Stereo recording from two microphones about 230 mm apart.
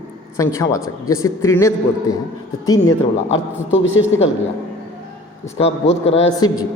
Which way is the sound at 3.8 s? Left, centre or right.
Left.